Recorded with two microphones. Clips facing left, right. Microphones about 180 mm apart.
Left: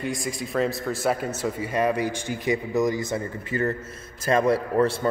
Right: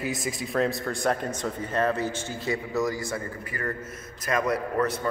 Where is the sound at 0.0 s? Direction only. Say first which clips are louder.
Left 1 dB; centre (ahead or behind).